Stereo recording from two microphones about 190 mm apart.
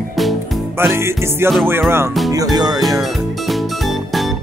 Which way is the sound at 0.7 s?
15° right (ahead or behind).